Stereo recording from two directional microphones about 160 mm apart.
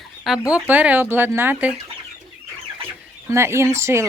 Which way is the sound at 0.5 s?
10° right (ahead or behind).